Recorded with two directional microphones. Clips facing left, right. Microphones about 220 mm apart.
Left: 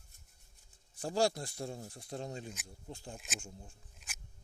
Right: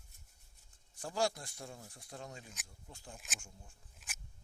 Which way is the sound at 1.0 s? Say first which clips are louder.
Left 4 dB; 30° left (ahead or behind).